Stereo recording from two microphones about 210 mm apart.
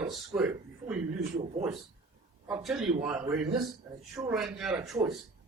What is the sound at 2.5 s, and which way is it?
Speech, 5° right (ahead or behind).